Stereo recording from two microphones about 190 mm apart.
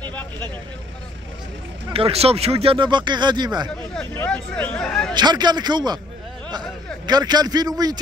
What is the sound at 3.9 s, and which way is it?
Speech, 10° left (ahead or behind).